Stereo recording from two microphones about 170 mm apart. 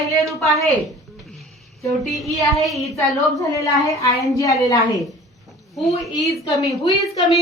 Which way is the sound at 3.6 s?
20° left (ahead or behind).